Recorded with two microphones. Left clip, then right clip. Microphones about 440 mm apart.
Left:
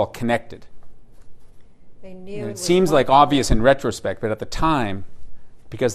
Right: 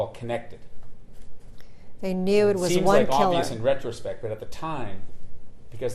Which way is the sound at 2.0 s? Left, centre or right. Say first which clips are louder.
Right 12 dB; right.